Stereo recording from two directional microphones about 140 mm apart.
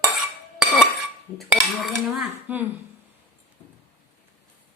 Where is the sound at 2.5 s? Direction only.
10° right (ahead or behind).